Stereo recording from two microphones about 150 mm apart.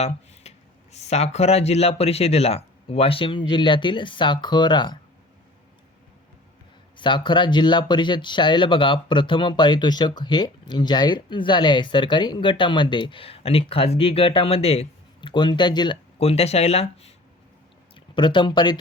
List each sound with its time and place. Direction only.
0.4 s a sound: 45° left (ahead or behind)
0.9 s speech: 50° left (ahead or behind); by 4.9 s 30° left (ahead or behind)
6.9 s speech: 30° left (ahead or behind)
16.1 s speech: 45° left (ahead or behind)
17.9 s speech: 30° left (ahead or behind)